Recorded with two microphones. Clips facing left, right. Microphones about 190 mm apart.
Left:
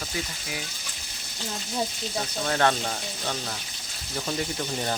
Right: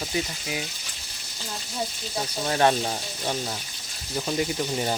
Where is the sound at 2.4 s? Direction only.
15° right (ahead or behind).